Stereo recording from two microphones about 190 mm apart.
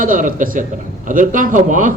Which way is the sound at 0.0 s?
45° right (ahead or behind).